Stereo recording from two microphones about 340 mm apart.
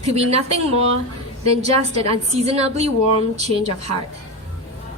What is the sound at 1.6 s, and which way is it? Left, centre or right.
A woman's voice, centre.